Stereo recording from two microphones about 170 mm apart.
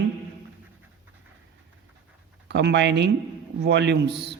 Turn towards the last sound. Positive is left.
turn(degrees=-90)